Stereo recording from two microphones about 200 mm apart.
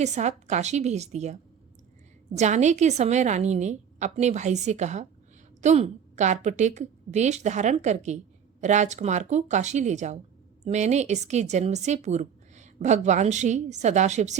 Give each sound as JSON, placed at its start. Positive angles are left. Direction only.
{"t": 0.0, "sound": "a woman's voice", "side_deg": -35}